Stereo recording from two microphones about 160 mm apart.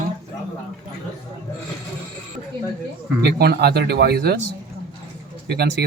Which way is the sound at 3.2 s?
90° right.